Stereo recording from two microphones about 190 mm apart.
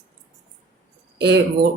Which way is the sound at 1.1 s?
60° right (ahead or behind).